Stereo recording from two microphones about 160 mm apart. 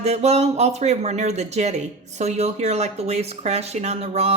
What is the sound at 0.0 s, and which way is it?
Speech, 40° right (ahead or behind).